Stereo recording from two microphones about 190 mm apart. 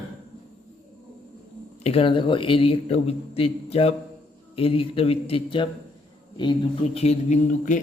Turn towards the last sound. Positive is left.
turn(degrees=40)  # may be behind; listen again after turning